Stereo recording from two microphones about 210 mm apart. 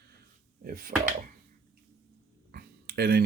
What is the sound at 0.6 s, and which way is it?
Speech, 40° right (ahead or behind).